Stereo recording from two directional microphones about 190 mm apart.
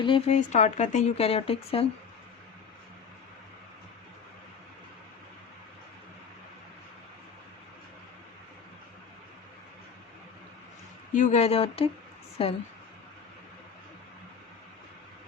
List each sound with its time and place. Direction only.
0.0 s speech: 25° left (ahead or behind)
0.3 s speech: 40° left (ahead or behind)
11.1 s speech: 40° left (ahead or behind)